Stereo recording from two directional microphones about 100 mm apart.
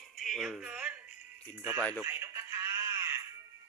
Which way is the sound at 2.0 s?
25° right (ahead or behind).